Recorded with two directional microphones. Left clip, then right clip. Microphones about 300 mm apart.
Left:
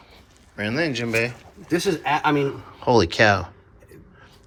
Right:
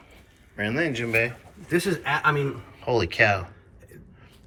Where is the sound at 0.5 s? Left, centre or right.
Centre.